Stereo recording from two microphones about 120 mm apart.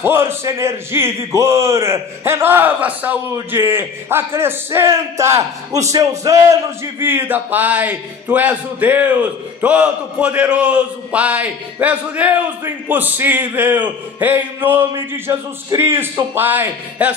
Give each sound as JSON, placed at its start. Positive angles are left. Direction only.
{"t": 0.0, "sound": "a man's voice", "side_deg": -20}
{"t": 7.0, "sound": "a man's voice", "side_deg": -20}